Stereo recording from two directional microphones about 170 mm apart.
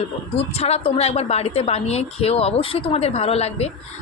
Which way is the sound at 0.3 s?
35° left (ahead or behind).